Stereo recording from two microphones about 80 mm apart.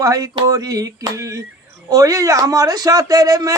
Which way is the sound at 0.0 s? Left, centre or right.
Right.